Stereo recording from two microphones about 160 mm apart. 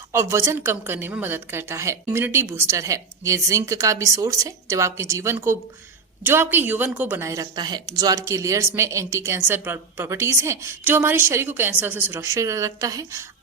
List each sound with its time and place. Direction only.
0.1 s speech: 15° right (ahead or behind)